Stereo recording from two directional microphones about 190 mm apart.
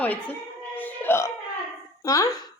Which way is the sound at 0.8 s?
10° left (ahead or behind).